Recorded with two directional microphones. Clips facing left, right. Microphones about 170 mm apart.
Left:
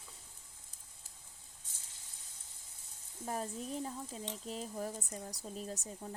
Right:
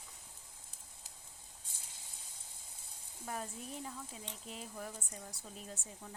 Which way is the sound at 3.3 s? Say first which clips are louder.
Left 4 dB; 35° left (ahead or behind).